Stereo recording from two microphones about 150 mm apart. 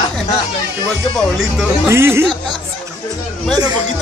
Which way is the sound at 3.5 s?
25° right (ahead or behind).